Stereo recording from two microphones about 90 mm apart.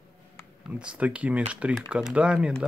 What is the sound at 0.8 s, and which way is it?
Speech, 15° right (ahead or behind).